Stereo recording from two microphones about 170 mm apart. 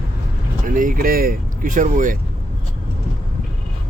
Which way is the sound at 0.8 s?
55° right (ahead or behind).